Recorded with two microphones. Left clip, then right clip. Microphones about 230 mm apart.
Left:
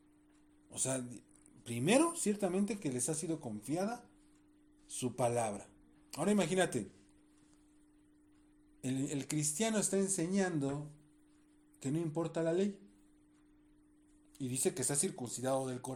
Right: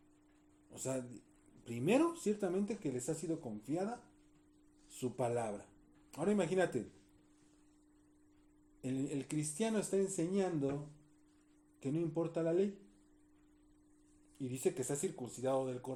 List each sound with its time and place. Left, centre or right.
0.7 s speech: left
4.9 s speech: left
8.8 s speech: left
11.8 s speech: left
14.3 s speech: left